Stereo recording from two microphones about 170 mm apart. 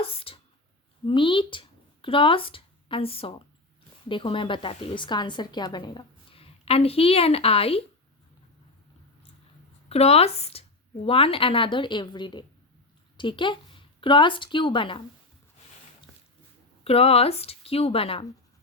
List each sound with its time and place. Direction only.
0.0 s a woman's voice: 35° left (ahead or behind)
9.9 s a woman's voice: 35° left (ahead or behind)
16.8 s a woman's voice: 35° left (ahead or behind)